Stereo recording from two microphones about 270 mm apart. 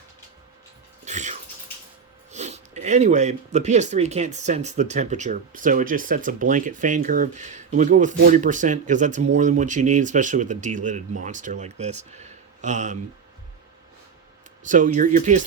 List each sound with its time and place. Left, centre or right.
1.0 s bathtub: right
2.3 s speech: right
14.6 s speech: right